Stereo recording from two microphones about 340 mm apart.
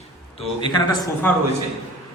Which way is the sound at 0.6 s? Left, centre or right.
Centre.